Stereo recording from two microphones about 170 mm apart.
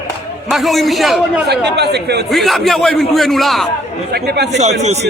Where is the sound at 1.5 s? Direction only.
75° right (ahead or behind).